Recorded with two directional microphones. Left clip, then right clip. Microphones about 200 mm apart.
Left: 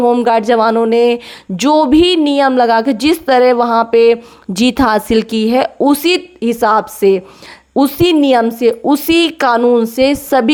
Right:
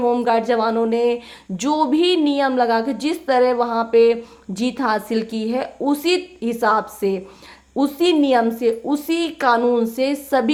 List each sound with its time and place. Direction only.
0.0 s speech: 35° left (ahead or behind)